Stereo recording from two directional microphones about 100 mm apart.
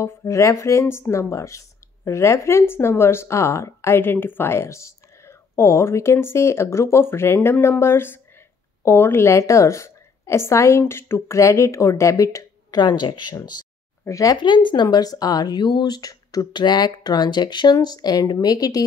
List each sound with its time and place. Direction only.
0.0 s speech: 25° left (ahead or behind); by 13.4 s 50° left (ahead or behind)
14.0 s speech: 35° left (ahead or behind)
14.4 s speech: 55° left (ahead or behind); by 18.9 s 35° left (ahead or behind)